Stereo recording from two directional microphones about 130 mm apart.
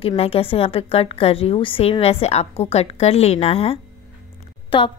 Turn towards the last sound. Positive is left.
turn(degrees=40)  # may be behind; listen again after turning